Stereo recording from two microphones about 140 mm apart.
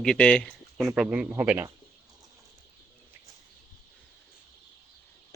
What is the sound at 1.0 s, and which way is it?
Speech, 10° right (ahead or behind).